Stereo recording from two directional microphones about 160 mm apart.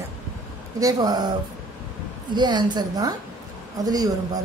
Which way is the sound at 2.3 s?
30° right (ahead or behind).